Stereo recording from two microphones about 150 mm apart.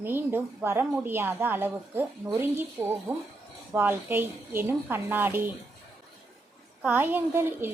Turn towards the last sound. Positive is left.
turn(degrees=-15)  # may be behind; listen again after turning